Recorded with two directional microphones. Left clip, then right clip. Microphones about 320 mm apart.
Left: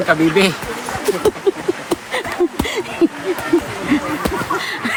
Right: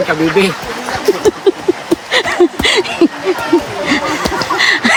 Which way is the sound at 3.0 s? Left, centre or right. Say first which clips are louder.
Right 2 dB; right.